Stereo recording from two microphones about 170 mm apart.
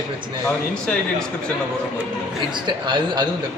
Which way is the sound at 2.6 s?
25° right (ahead or behind).